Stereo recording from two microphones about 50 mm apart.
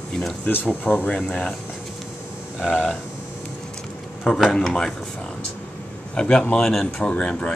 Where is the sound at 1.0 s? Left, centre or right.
Left.